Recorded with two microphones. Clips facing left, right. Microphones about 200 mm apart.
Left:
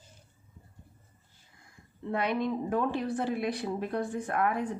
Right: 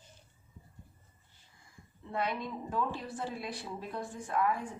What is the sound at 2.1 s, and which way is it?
A woman's voice, 65° left (ahead or behind).